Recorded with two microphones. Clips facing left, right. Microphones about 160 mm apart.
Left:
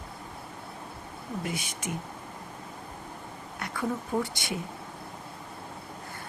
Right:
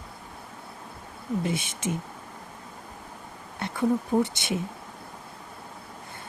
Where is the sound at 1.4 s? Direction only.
25° right (ahead or behind).